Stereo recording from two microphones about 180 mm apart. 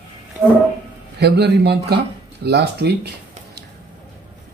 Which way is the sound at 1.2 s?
65° right (ahead or behind).